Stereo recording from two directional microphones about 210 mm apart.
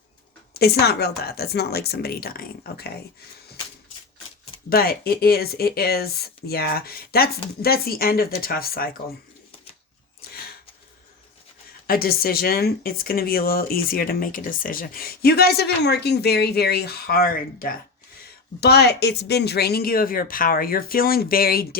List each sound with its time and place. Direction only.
0.5 s speech: 50° left (ahead or behind)
4.7 s speech: 45° left (ahead or behind)
11.9 s speech: 45° left (ahead or behind)